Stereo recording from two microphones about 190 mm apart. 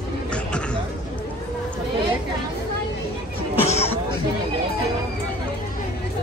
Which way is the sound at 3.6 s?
35° left (ahead or behind).